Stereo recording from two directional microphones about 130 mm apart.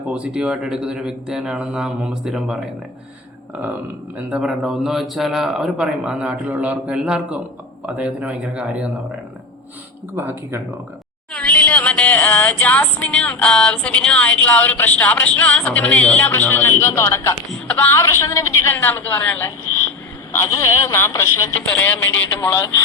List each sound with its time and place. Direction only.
0.1 s speech: 10° right (ahead or behind)
4.3 s speech: 5° right (ahead or behind)
10.2 s speech: 15° right (ahead or behind)
11.3 s music: 10° left (ahead or behind)